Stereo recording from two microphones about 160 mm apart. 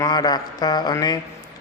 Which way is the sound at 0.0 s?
25° left (ahead or behind).